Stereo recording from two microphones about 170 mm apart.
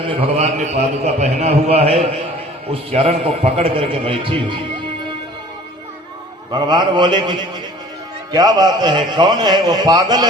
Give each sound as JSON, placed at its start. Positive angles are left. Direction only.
{"t": 0.0, "sound": "a man's voice", "side_deg": -35}
{"t": 6.5, "sound": "a man's voice", "side_deg": -25}